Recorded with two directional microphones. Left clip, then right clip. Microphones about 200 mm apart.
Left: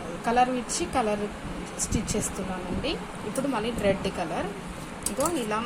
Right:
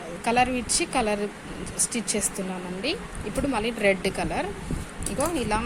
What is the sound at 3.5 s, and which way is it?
Speech, 45° right (ahead or behind).